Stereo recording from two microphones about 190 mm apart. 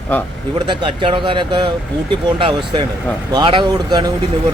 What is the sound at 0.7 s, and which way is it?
A man's voice, 25° right (ahead or behind).